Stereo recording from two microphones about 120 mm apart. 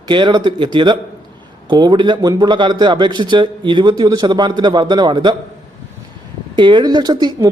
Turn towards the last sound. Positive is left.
turn(degrees=-35)  # may be behind; listen again after turning